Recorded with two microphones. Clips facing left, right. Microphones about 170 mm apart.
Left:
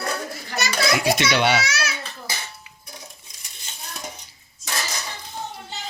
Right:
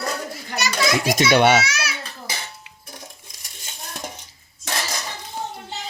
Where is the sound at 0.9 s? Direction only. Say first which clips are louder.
Right 5 dB; 45° right (ahead or behind).